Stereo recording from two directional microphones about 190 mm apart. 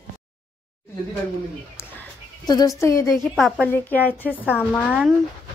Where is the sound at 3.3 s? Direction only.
Centre (ahead or behind).